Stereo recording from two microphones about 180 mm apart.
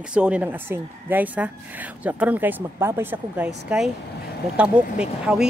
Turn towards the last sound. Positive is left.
turn(degrees=-5)  # may be behind; listen again after turning